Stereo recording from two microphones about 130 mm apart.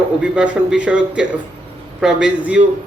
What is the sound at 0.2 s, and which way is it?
A man's voice, 5° right (ahead or behind).